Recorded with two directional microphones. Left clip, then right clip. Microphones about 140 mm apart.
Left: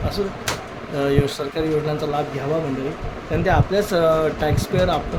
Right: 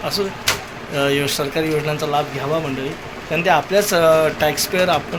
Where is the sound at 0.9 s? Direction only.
10° left (ahead or behind).